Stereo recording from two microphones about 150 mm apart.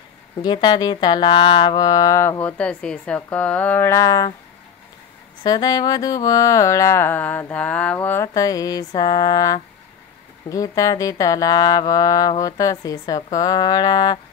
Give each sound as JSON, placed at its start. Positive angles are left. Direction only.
{"t": 0.4, "sound": "speech", "side_deg": 30}
{"t": 5.4, "sound": "speech", "side_deg": 25}
{"t": 8.3, "sound": "speech", "side_deg": 25}